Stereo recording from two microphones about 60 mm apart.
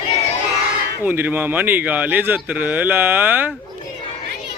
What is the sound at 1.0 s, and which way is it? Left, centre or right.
Speech, right.